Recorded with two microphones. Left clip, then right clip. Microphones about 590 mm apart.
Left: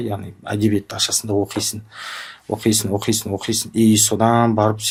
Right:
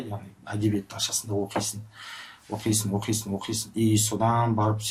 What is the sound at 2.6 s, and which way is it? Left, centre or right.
Speech, left.